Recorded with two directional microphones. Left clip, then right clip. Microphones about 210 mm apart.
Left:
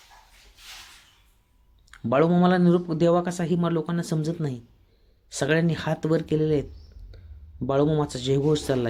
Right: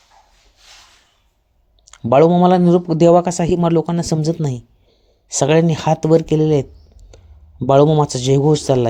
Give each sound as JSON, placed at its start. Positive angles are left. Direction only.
{"t": 1.9, "sound": "speech", "side_deg": -25}
{"t": 7.7, "sound": "speech", "side_deg": -30}